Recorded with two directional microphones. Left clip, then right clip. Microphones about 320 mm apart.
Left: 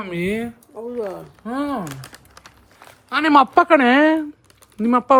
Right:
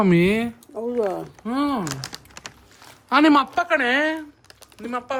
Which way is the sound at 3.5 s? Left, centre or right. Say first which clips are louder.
Left 6 dB; centre.